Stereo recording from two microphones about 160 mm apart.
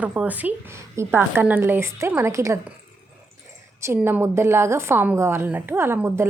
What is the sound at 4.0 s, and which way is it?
A woman's voice, 10° right (ahead or behind).